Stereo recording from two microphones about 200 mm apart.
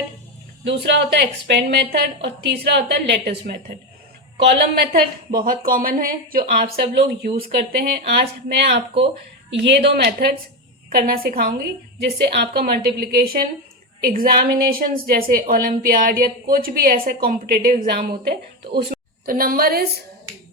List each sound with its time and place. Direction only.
0.6 s a woman's voice: 60° right (ahead or behind)
5.4 s a woman's voice: 45° right (ahead or behind)